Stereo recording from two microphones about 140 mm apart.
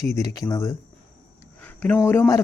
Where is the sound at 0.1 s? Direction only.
25° left (ahead or behind).